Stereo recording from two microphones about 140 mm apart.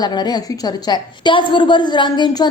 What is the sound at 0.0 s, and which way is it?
A woman's voice, 30° left (ahead or behind).